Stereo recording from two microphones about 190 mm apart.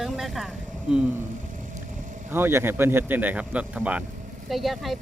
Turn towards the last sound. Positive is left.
turn(degrees=0)  # may be behind; listen again after turning